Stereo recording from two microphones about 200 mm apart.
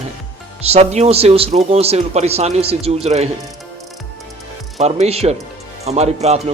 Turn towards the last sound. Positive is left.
turn(degrees=-30)  # may be behind; listen again after turning